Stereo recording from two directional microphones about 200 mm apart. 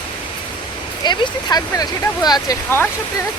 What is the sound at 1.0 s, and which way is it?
Speech, 20° left (ahead or behind).